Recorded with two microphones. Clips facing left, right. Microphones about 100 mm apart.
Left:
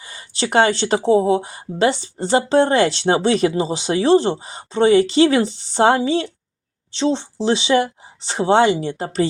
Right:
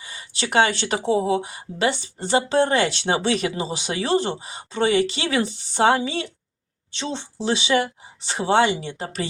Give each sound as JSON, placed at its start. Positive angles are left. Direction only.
{"t": 0.0, "sound": "speech", "side_deg": 35}